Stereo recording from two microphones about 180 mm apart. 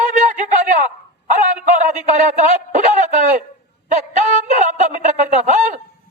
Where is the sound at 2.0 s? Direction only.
40° right (ahead or behind).